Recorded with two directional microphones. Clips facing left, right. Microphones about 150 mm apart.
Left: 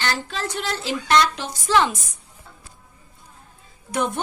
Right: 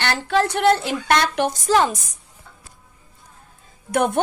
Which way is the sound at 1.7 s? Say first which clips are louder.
Right 1 dB; 40° right (ahead or behind).